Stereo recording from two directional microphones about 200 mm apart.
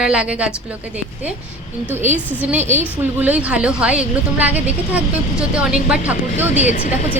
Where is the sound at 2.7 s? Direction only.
10° right (ahead or behind).